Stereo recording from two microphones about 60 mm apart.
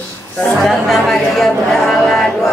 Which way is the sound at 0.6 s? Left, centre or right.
Centre.